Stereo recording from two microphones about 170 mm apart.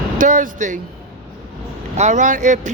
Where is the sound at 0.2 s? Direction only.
50° right (ahead or behind).